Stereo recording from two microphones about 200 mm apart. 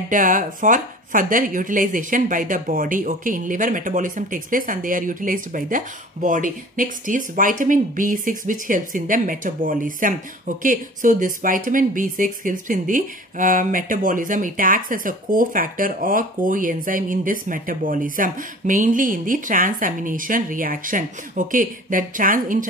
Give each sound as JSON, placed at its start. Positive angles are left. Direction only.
{"t": 0.1, "sound": "speech", "side_deg": -40}